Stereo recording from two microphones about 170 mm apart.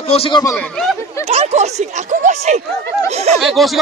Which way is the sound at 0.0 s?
35° left (ahead or behind).